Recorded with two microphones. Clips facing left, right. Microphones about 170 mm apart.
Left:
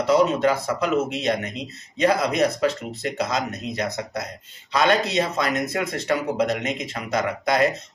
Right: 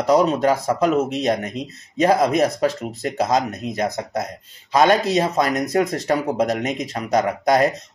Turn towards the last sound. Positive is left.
turn(degrees=-45)  # may be behind; listen again after turning